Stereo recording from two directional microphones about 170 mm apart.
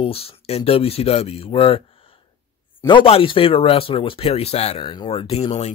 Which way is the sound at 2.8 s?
30° left (ahead or behind).